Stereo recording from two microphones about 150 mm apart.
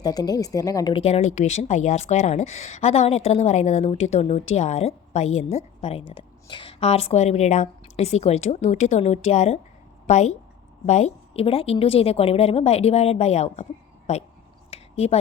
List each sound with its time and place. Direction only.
0.0 s speech: 25° left (ahead or behind)
0.9 s speech: 40° left (ahead or behind)
14.7 s a sound: 45° left (ahead or behind)